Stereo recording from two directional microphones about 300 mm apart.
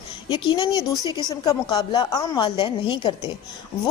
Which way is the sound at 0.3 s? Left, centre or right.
Centre.